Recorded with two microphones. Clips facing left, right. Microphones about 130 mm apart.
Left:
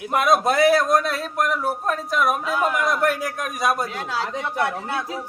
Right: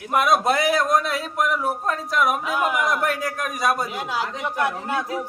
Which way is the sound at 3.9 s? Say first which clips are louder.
Even; 15° right (ahead or behind).